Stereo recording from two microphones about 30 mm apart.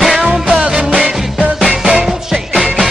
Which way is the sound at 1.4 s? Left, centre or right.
Centre.